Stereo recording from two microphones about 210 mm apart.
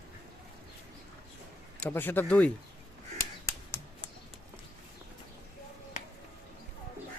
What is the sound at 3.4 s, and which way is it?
Finger snapping, 10° left (ahead or behind).